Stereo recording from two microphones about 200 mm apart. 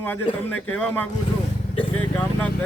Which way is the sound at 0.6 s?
5° left (ahead or behind).